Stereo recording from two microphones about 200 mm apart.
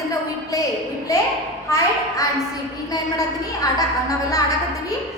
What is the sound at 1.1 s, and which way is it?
A woman's voice, 15° left (ahead or behind).